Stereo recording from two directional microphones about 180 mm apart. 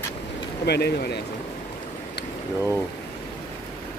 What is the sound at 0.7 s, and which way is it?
Speech, 65° left (ahead or behind).